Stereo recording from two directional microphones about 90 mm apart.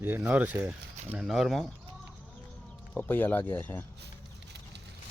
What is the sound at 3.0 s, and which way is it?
Speech, 25° left (ahead or behind).